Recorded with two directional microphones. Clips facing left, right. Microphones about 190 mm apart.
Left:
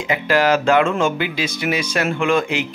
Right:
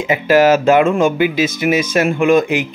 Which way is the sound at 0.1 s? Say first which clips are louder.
Right 6 dB; 20° right (ahead or behind).